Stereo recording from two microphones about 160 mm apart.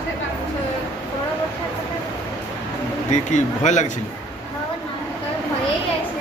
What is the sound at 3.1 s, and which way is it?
Speech, 45° left (ahead or behind).